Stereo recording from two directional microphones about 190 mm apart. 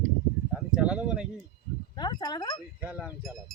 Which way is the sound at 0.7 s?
5° right (ahead or behind).